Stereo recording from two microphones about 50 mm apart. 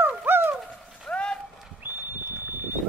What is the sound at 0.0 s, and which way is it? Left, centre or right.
Bird, right.